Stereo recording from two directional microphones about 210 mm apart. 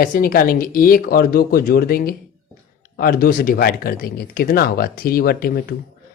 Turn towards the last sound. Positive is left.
turn(degrees=45)  # may be behind; listen again after turning